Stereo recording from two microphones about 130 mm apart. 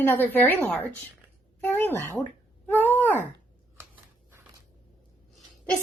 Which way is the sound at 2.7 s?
15° left (ahead or behind).